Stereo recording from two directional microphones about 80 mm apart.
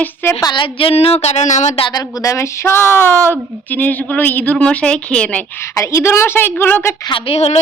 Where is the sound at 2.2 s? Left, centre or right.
Left; by 5.4 s centre.